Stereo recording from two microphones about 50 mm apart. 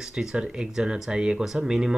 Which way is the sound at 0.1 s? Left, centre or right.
Centre.